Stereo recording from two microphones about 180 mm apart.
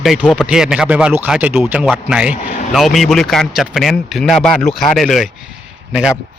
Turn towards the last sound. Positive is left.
turn(degrees=-5)  # may be behind; listen again after turning